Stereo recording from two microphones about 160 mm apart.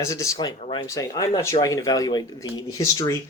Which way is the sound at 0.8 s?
20° left (ahead or behind).